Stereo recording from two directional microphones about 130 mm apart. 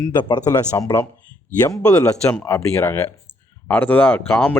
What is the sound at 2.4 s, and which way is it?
A man's voice, 20° left (ahead or behind).